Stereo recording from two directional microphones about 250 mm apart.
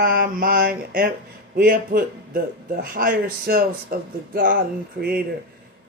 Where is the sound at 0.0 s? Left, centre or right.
Right.